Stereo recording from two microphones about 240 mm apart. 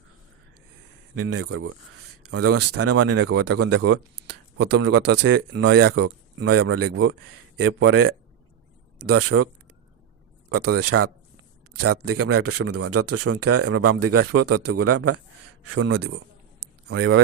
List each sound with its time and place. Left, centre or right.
1.1 s speech: right
3.2 s speech: right
6.5 s speech: right
10.7 s speech: right